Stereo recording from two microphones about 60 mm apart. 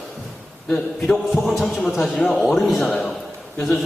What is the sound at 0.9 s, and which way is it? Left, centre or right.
Speech, centre.